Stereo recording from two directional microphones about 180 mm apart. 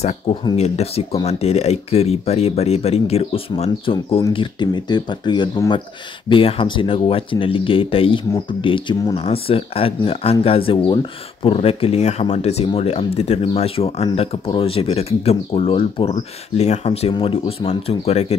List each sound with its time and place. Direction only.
0.0 s speech: 30° left (ahead or behind)